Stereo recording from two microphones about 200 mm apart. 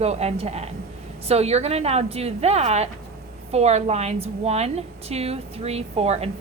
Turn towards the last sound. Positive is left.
turn(degrees=-30)  # may be behind; listen again after turning